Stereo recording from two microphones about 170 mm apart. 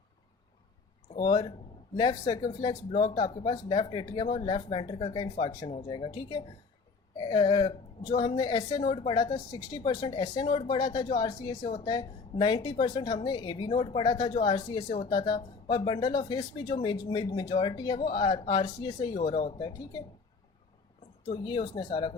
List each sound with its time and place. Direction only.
1.1 s speech: 25° left (ahead or behind)
21.4 s speech: 25° left (ahead or behind)